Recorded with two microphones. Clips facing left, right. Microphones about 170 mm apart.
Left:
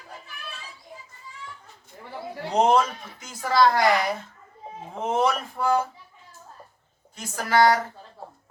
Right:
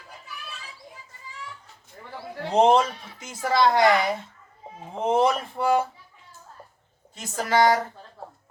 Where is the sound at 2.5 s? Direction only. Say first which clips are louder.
Right 2 dB; 25° right (ahead or behind).